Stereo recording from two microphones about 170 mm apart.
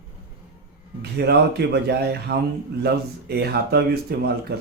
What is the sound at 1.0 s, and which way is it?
Speech, 70° right (ahead or behind).